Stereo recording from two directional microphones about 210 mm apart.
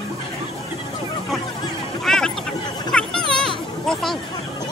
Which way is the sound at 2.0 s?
Centre (ahead or behind).